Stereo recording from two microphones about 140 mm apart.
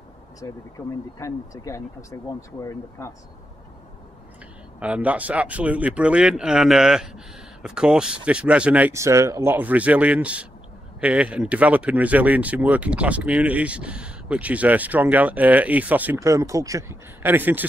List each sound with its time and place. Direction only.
0.4 s speech: 25° left (ahead or behind)
4.7 s speech: 10° right (ahead or behind)